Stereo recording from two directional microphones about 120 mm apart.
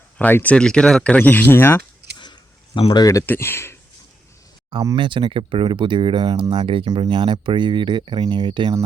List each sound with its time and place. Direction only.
0.2 s speech: 15° left (ahead or behind)
2.1 s a sound: 40° left (ahead or behind)
2.9 s speech: 30° left (ahead or behind)
4.9 s speech: 45° right (ahead or behind)
6.8 s speech: 35° right (ahead or behind)